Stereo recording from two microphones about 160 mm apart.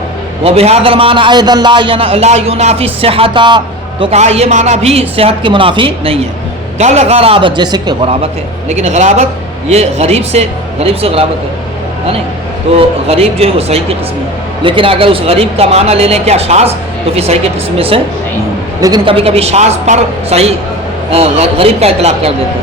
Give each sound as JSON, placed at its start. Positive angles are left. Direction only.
{"t": 0.4, "sound": "a man's voice", "side_deg": -40}
{"t": 4.0, "sound": "a man's voice", "side_deg": -40}
{"t": 6.7, "sound": "a man's voice", "side_deg": -45}
{"t": 8.7, "sound": "a man's voice", "side_deg": -45}
{"t": 12.7, "sound": "a man's voice", "side_deg": -35}
{"t": 17.7, "sound": "a man's voice", "side_deg": -35}
{"t": 18.8, "sound": "a man's voice", "side_deg": -25}